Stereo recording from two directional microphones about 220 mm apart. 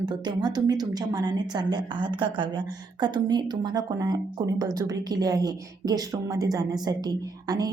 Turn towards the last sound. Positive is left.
turn(degrees=-15)  # may be behind; listen again after turning